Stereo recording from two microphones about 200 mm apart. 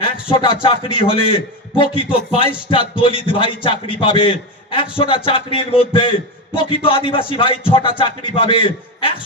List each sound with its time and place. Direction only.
0.0 s a man's voice: 25° left (ahead or behind)